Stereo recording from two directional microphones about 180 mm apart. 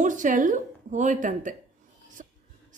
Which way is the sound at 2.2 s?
45° right (ahead or behind).